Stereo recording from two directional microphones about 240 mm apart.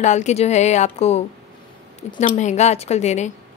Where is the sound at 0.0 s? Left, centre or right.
Left.